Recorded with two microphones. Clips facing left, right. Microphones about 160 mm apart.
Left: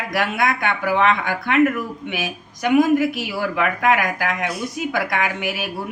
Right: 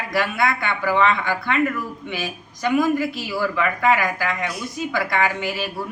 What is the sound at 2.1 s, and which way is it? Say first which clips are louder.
Speech: left 1 dB; 20° left (ahead or behind).